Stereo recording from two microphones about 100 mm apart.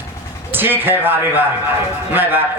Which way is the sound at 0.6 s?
20° right (ahead or behind).